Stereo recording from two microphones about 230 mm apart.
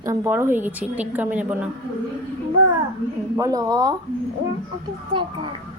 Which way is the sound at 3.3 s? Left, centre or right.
Centre.